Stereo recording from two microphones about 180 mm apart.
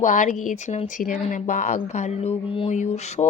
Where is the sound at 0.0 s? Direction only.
45° left (ahead or behind).